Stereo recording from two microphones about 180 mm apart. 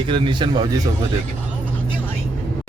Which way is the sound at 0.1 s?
25° right (ahead or behind).